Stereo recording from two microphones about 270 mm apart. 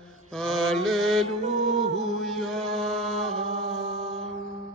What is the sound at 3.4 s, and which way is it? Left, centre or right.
Music, right.